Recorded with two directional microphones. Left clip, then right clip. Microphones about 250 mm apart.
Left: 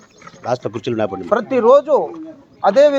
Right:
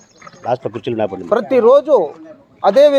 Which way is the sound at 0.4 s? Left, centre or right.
Centre.